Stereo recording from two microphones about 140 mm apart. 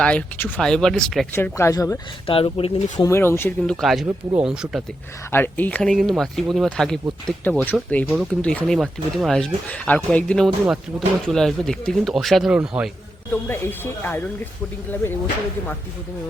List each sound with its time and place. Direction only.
0.0 s speech: 10° left (ahead or behind)
1.4 s speech: 20° left (ahead or behind)
2.2 s speech: 40° left (ahead or behind)
3.0 s speech: 20° left (ahead or behind)
3.6 s speech: centre (ahead or behind)
5.3 s speech: 15° left (ahead or behind)
8.0 s speech: 5° right (ahead or behind)
8.3 s a man's voice: 10° left (ahead or behind); by 12.9 s 10° right (ahead or behind)
13.3 s speech: 15° left (ahead or behind)